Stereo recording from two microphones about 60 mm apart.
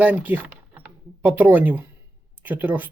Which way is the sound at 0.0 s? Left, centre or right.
Right.